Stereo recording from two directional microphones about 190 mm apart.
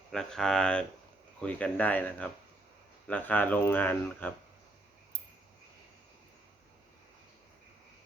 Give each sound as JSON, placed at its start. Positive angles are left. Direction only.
{"t": 0.1, "sound": "speech", "side_deg": 5}